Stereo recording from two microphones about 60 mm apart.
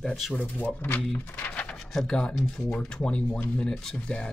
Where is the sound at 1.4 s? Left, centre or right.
Left.